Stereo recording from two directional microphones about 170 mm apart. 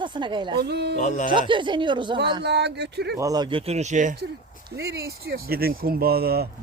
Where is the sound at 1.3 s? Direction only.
30° right (ahead or behind).